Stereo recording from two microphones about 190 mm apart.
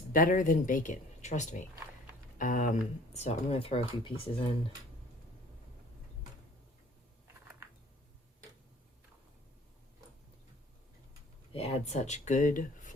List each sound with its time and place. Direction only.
0.1 s speech: 45° left (ahead or behind); by 4.3 s 30° left (ahead or behind)
11.5 s speech: 35° left (ahead or behind)